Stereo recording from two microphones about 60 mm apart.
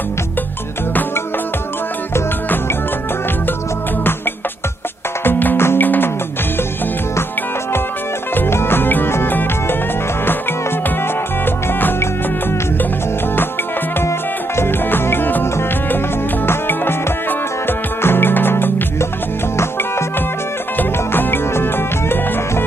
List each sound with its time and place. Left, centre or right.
5.2 s music: left
8.4 s music: left
11.4 s music: left
14.0 s music: left
19.5 s music: left
20.7 s music: left